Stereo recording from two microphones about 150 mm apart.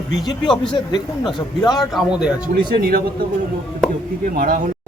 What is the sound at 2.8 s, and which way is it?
Speech, 90° right.